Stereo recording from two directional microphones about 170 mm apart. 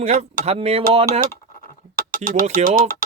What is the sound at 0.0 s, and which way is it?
Speech, 40° right (ahead or behind).